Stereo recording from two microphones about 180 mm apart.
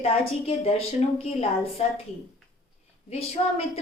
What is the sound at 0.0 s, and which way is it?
A woman's voice, 35° left (ahead or behind).